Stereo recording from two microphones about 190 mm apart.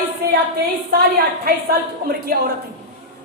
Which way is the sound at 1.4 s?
50° right (ahead or behind).